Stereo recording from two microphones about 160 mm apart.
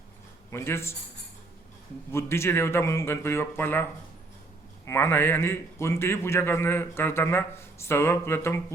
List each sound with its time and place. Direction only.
0.5 s a man's voice: 15° left (ahead or behind)
2.1 s a man's voice: 15° left (ahead or behind)
4.9 s a man's voice: 15° left (ahead or behind)